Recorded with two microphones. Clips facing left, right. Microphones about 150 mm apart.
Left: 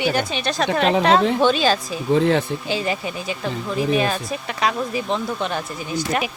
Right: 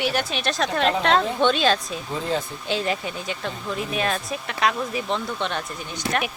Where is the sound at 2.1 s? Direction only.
75° left (ahead or behind).